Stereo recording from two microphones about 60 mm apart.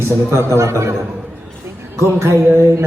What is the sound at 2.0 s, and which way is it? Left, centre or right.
Speech, right.